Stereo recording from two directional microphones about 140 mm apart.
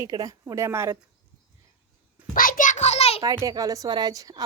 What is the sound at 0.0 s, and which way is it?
Speech, 25° right (ahead or behind).